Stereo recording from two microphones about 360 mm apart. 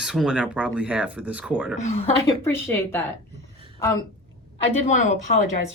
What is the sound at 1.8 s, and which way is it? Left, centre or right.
Speech, centre.